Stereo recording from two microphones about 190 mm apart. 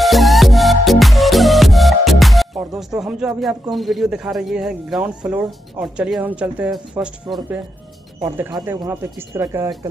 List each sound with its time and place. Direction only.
0.0 s music: centre (ahead or behind)
3.7 s speech: centre (ahead or behind)
8.2 s speech: 20° right (ahead or behind)